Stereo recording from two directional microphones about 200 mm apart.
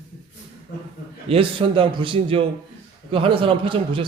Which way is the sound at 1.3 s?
25° right (ahead or behind).